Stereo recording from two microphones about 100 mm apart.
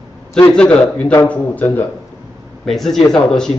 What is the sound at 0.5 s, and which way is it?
A man's voice, 10° left (ahead or behind).